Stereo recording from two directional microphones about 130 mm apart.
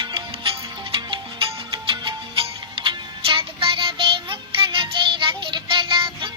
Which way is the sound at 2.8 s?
40° right (ahead or behind).